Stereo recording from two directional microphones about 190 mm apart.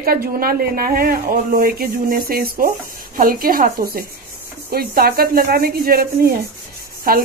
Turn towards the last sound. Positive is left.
turn(degrees=-50)  # may be behind; listen again after turning